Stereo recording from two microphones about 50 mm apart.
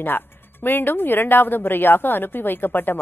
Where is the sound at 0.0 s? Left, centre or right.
Left.